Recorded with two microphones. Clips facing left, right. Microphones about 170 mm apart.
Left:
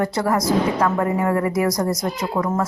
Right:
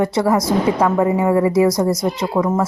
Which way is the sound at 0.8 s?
15° right (ahead or behind).